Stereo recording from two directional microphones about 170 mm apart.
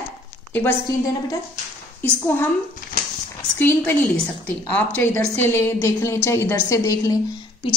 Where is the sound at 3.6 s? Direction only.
10° left (ahead or behind).